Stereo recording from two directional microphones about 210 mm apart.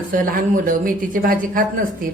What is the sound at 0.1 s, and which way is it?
A woman's voice, 40° right (ahead or behind).